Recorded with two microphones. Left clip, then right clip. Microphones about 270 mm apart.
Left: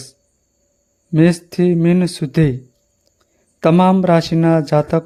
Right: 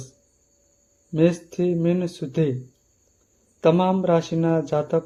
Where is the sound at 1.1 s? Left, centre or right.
Left.